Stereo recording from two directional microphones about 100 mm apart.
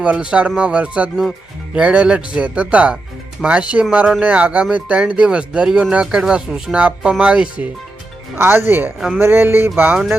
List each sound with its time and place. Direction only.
0.0 s speech: 10° right (ahead or behind)